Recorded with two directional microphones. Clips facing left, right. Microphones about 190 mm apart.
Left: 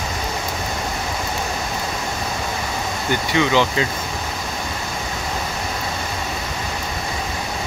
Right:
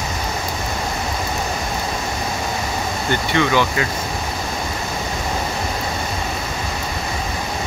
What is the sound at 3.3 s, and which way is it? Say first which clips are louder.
Speech: left 1 dB; 15° left (ahead or behind).